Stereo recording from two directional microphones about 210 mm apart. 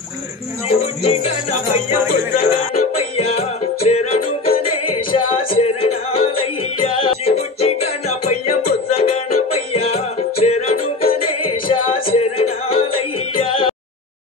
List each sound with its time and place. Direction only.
0.7 s speech: 30° left (ahead or behind)
2.7 s music: 30° left (ahead or behind)